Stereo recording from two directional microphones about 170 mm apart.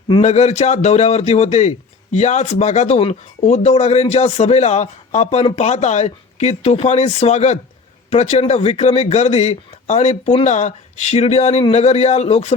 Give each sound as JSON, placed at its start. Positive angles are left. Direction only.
{"t": 0.2, "sound": "speech", "side_deg": 40}